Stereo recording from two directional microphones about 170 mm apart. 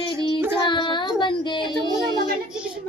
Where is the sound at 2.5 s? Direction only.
5° right (ahead or behind).